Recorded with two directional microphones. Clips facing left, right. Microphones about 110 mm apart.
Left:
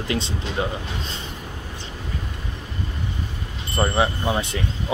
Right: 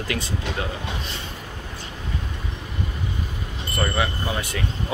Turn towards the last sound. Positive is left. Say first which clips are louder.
# left 4 dB
turn(degrees=25)  # may be behind; listen again after turning